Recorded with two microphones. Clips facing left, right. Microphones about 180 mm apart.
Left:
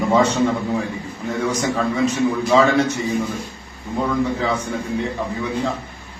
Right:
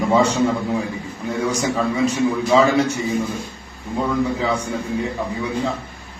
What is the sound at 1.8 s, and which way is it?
A man's voice, 10° right (ahead or behind).